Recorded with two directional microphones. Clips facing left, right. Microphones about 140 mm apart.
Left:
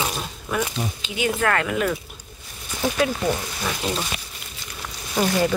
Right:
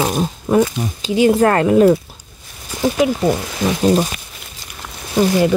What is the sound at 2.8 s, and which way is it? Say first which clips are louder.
Speech: right 7 dB; 15° right (ahead or behind).